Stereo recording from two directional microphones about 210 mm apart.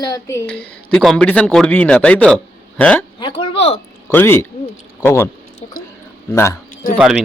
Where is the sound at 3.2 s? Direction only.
20° left (ahead or behind).